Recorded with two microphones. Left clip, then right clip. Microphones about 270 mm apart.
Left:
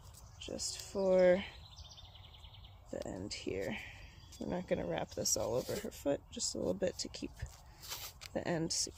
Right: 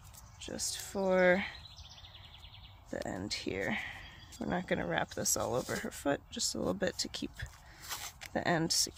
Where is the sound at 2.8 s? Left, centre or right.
Right.